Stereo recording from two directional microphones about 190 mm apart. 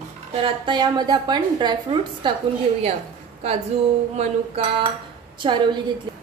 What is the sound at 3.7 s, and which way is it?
Speech, 35° right (ahead or behind).